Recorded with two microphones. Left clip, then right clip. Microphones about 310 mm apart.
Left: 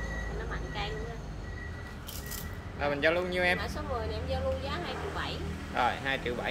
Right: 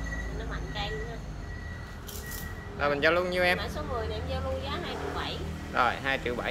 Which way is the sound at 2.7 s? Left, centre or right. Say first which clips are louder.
Right 3 dB; centre.